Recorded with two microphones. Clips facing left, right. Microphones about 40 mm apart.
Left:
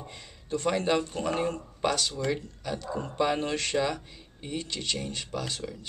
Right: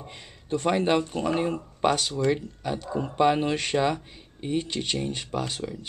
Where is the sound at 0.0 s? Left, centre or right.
Centre.